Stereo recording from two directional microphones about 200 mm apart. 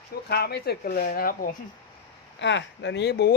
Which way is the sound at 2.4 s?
65° left (ahead or behind).